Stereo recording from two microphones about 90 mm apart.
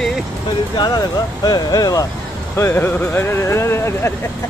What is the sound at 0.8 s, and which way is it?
Speech, 45° left (ahead or behind).